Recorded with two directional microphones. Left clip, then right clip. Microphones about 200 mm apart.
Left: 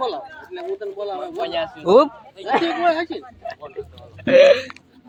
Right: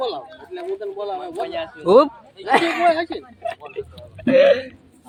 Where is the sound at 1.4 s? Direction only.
55° left (ahead or behind).